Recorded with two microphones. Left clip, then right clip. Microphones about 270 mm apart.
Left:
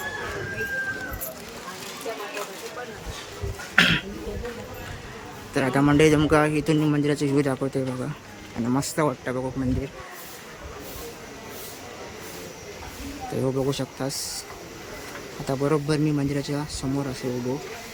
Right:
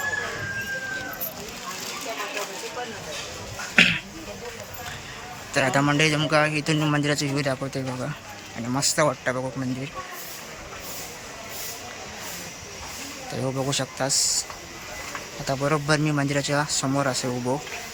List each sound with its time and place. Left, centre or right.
3.8 s a sound: left
5.5 s a man's voice: centre
13.4 s a man's voice: centre
15.4 s speech: centre